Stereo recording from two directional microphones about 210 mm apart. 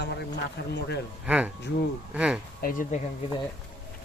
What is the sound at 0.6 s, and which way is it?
Speech, 55° left (ahead or behind).